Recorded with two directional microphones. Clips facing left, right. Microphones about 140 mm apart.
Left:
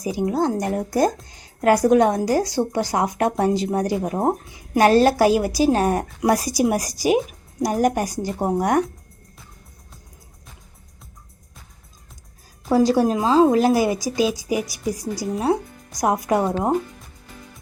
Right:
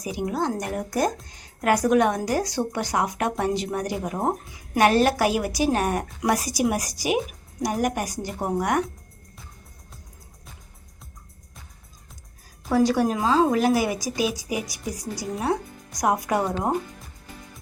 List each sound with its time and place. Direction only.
0.0 s a woman's voice: 30° left (ahead or behind)
12.6 s a woman's voice: 30° left (ahead or behind)